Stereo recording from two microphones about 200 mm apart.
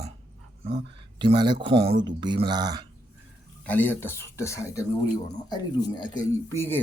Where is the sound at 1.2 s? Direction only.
25° right (ahead or behind).